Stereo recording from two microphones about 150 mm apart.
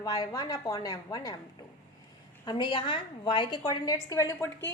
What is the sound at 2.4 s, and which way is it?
A woman's voice, 30° left (ahead or behind).